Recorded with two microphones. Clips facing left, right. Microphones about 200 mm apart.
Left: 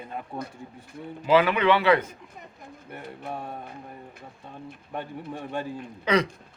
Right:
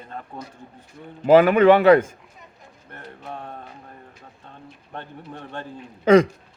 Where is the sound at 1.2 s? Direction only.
50° right (ahead or behind).